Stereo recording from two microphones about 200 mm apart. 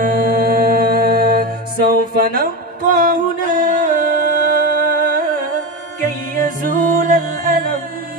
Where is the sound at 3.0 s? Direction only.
40° right (ahead or behind).